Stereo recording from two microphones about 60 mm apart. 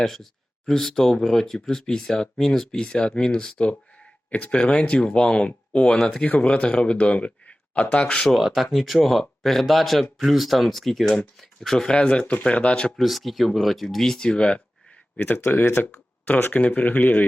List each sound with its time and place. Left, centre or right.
0.0 s speech: centre
6.2 s speech: left
8.2 s speech: centre
13.0 s speech: centre
14.3 s speech: centre
15.2 s speech: left
16.5 s speech: left